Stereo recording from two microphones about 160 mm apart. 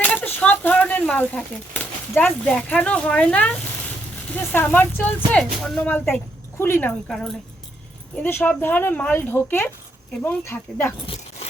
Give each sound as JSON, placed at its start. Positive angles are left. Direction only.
{"t": 0.0, "sound": "speech", "side_deg": 10}
{"t": 11.0, "sound": "keys jangling", "side_deg": 35}